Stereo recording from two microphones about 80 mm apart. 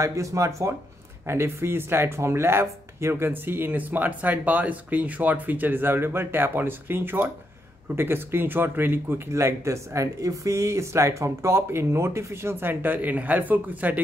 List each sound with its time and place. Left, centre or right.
0.0 s speech: right
9.3 s speech: right